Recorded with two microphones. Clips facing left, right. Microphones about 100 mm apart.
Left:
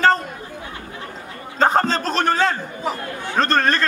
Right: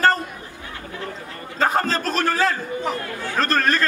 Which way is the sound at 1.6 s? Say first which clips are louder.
Left 3 dB; 30° left (ahead or behind).